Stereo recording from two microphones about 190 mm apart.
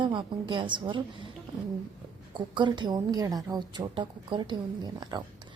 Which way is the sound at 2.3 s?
25° right (ahead or behind).